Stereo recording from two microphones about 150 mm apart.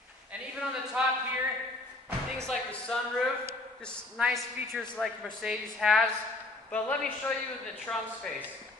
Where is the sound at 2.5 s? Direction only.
5° left (ahead or behind).